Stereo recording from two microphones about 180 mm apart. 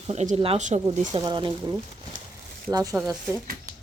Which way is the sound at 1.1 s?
25° right (ahead or behind).